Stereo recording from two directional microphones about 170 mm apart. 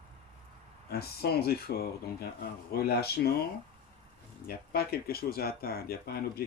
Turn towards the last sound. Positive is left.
turn(degrees=65)  # may be behind; listen again after turning